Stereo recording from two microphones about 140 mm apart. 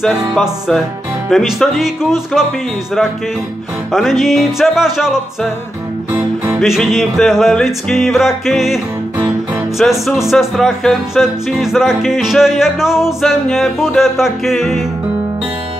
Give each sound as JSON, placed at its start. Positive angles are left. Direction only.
{"t": 0.4, "sound": "music", "side_deg": 0}
{"t": 3.9, "sound": "music", "side_deg": 0}
{"t": 6.1, "sound": "music", "side_deg": -25}
{"t": 6.6, "sound": "music", "side_deg": 0}
{"t": 9.8, "sound": "music", "side_deg": 0}